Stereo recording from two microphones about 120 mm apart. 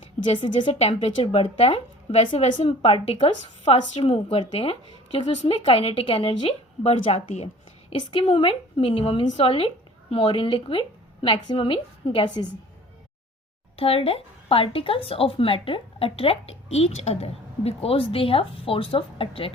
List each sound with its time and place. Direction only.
0.4 s speech: 45° left (ahead or behind)
0.8 s a woman's voice: 60° left (ahead or behind)
3.6 s a woman's voice: 55° left (ahead or behind)
13.7 s speech: 55° left (ahead or behind)